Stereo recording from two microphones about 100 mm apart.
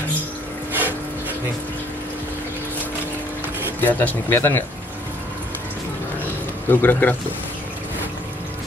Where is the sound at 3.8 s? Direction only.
15° left (ahead or behind).